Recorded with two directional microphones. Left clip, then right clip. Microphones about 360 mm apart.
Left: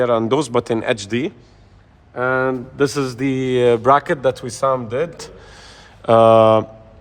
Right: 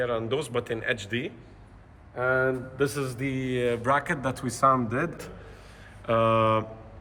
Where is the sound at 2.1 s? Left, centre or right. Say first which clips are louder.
Left 7 dB; left; by 5.1 s centre.